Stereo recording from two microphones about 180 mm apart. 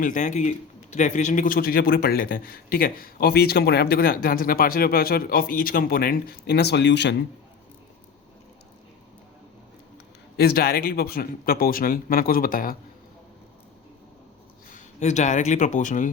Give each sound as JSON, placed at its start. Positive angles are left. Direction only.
{"t": 0.0, "sound": "a man's voice", "side_deg": 45}
{"t": 10.3, "sound": "a man's voice", "side_deg": 60}
{"t": 14.7, "sound": "speech", "side_deg": 45}